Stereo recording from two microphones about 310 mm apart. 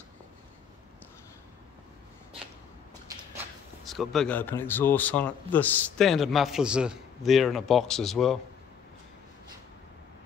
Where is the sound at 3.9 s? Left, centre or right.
Centre.